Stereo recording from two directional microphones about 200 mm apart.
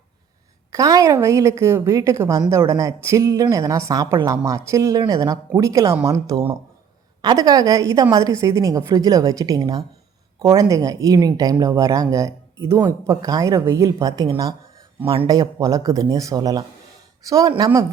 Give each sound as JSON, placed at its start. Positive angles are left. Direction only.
{"t": 0.7, "sound": "a woman's voice", "side_deg": -15}